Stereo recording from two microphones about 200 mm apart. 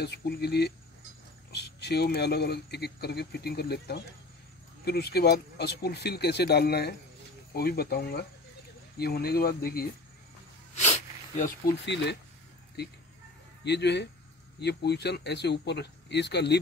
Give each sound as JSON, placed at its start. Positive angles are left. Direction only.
{"t": 0.0, "sound": "speech", "side_deg": 55}
{"t": 10.7, "sound": "a sound", "side_deg": 35}
{"t": 11.8, "sound": "speech", "side_deg": 60}
{"t": 13.7, "sound": "speech", "side_deg": 60}